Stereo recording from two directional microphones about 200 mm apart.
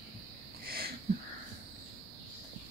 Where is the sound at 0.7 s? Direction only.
50° right (ahead or behind).